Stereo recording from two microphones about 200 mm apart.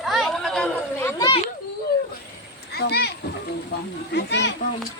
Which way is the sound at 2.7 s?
55° left (ahead or behind).